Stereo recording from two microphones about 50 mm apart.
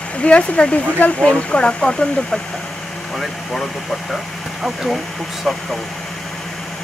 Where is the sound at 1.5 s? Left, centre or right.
Centre.